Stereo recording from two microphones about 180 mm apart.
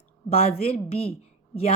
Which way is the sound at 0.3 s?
35° left (ahead or behind).